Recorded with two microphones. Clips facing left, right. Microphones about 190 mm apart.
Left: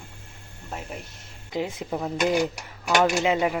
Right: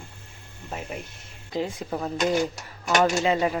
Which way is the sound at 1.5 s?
20° left (ahead or behind).